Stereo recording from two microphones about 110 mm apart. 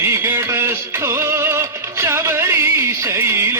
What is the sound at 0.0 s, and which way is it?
Music, 20° right (ahead or behind).